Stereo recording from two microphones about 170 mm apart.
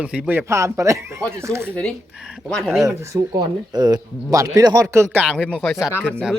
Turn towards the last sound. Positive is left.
turn(degrees=-5)  # may be behind; listen again after turning